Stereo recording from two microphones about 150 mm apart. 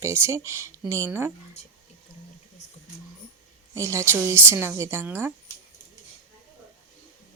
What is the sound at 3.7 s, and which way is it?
A woman's voice, 20° right (ahead or behind).